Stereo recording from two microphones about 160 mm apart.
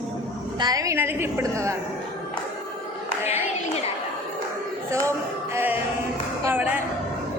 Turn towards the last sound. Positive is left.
turn(degrees=-10)  # may be behind; listen again after turning